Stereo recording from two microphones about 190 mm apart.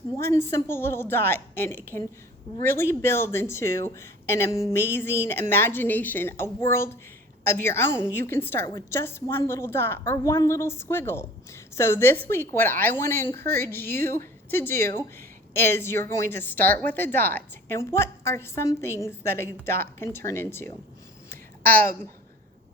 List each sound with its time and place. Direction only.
0.2 s a woman's voice: 15° left (ahead or behind)